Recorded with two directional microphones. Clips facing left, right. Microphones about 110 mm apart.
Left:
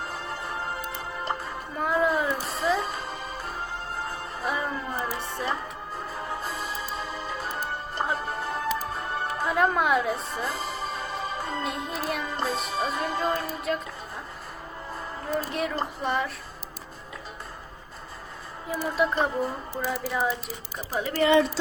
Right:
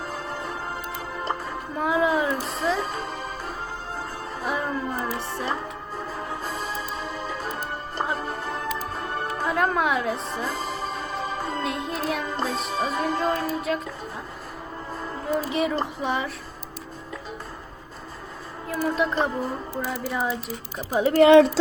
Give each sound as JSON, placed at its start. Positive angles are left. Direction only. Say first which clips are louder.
{"t": 1.8, "sound": "speech", "louder": "right 2 dB", "side_deg": 0}
{"t": 4.4, "sound": "speech", "louder": "right 2 dB", "side_deg": 0}
{"t": 7.0, "sound": "music", "louder": "right 2 dB", "side_deg": 0}
{"t": 9.4, "sound": "speech", "louder": "even", "side_deg": 0}
{"t": 15.2, "sound": "speech", "louder": "right 4 dB", "side_deg": 0}
{"t": 18.7, "sound": "speech", "louder": "right 1 dB", "side_deg": 0}
{"t": 21.2, "sound": "a woman's voice", "louder": "right 7 dB", "side_deg": -90}